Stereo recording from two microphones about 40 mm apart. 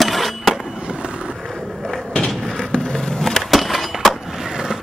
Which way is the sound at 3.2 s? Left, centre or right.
Centre.